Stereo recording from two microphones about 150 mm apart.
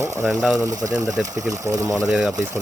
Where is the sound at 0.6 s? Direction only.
25° right (ahead or behind).